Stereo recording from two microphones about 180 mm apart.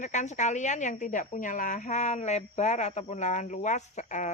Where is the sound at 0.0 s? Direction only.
40° left (ahead or behind).